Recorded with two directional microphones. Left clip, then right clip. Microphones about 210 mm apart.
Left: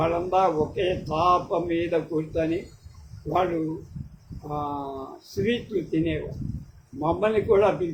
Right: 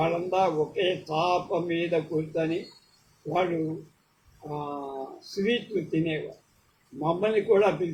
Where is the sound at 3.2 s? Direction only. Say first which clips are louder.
Left 3 dB; 5° left (ahead or behind).